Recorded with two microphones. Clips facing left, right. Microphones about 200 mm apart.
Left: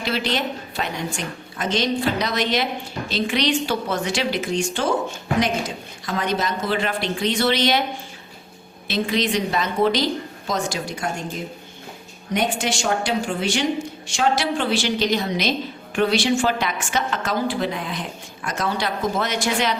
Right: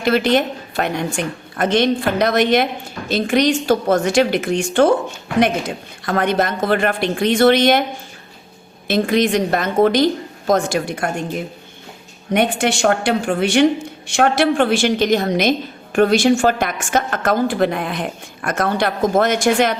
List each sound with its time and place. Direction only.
0.0 s a woman's voice: 55° right (ahead or behind)
8.9 s a woman's voice: 50° right (ahead or behind)
12.3 s a woman's voice: 60° right (ahead or behind)